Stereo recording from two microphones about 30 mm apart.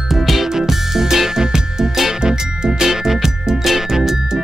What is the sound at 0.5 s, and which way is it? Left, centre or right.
Music, centre.